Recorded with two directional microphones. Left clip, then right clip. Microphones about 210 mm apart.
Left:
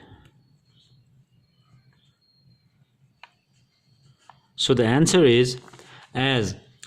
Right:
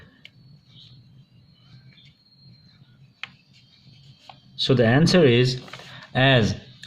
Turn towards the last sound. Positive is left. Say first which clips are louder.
# right 5 dB
turn(degrees=40)  # may be behind; listen again after turning